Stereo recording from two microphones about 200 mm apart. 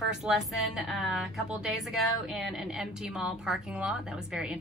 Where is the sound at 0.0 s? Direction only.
Centre (ahead or behind).